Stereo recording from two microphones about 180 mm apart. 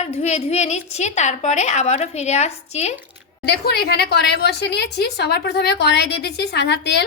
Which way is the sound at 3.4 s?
65° left (ahead or behind).